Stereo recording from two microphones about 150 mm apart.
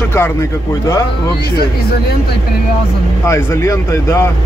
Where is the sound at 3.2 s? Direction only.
20° left (ahead or behind).